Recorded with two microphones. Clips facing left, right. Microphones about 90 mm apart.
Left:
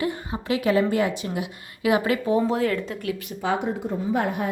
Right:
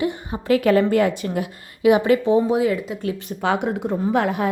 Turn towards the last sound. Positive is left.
turn(degrees=-90)